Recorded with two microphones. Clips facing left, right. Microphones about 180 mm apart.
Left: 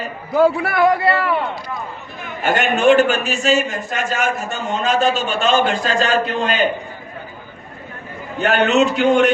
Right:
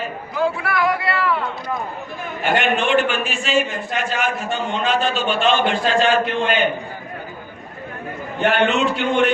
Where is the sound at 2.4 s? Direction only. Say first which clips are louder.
Left 5 dB; 45° left (ahead or behind).